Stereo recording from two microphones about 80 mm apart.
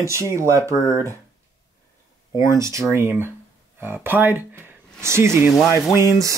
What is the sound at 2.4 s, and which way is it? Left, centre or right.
Speech, right.